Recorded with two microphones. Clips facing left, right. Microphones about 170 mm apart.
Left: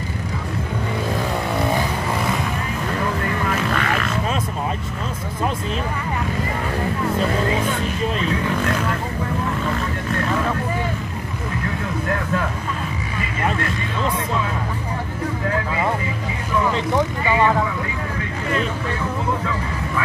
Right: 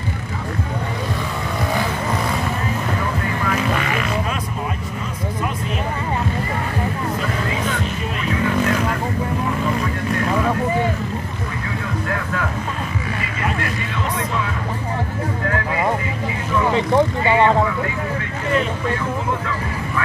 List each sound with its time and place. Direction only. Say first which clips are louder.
16.7 s vehicle: right 4 dB; 20° right (ahead or behind)